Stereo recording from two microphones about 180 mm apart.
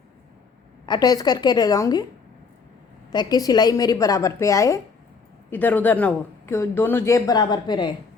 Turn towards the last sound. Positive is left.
turn(degrees=25)  # may be behind; listen again after turning